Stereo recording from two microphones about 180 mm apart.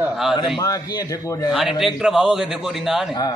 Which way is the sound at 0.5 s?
20° left (ahead or behind).